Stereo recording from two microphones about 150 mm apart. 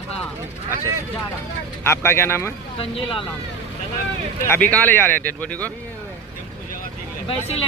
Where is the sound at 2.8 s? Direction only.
40° left (ahead or behind).